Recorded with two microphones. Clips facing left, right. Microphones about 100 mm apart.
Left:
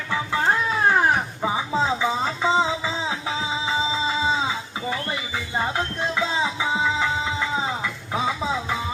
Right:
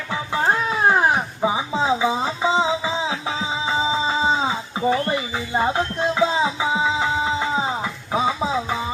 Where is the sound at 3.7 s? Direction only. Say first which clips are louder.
Right 4 dB; 30° right (ahead or behind).